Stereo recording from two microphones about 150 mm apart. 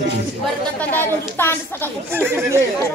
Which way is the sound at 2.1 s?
15° right (ahead or behind).